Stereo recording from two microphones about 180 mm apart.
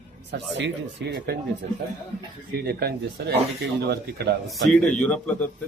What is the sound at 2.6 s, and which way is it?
Speech, 60° right (ahead or behind).